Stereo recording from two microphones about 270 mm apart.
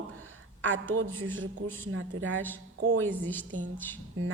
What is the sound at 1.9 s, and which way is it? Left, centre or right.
Speech, right.